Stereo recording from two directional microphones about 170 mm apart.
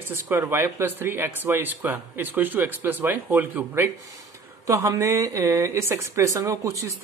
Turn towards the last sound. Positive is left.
turn(degrees=-20)  # may be behind; listen again after turning